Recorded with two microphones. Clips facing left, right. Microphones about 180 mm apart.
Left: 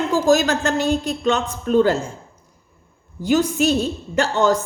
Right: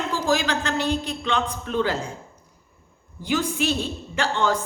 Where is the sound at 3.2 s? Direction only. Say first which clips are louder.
Left 6 dB; 45° left (ahead or behind).